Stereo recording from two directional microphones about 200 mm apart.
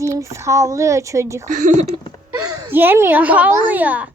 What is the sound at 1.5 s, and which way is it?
Speech, 40° right (ahead or behind).